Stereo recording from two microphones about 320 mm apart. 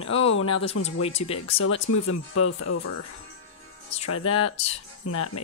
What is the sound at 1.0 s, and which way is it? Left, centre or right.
Speech, centre.